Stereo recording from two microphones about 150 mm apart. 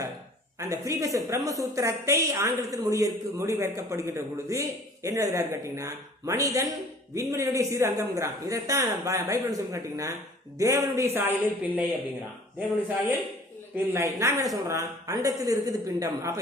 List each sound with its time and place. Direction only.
0.7 s a woman's voice: 20° right (ahead or behind)
13.7 s a woman's voice: 15° right (ahead or behind)